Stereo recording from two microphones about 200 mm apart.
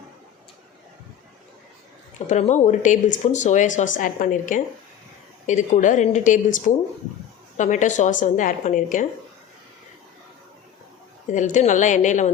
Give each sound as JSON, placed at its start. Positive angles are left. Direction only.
{"t": 2.1, "sound": "speech", "side_deg": 35}
{"t": 11.3, "sound": "speech", "side_deg": 40}